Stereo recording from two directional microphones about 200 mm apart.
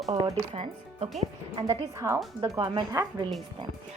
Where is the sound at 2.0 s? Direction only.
15° right (ahead or behind).